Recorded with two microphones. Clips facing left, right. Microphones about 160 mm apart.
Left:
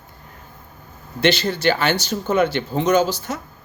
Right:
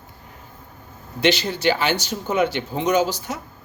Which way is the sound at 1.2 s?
15° right (ahead or behind).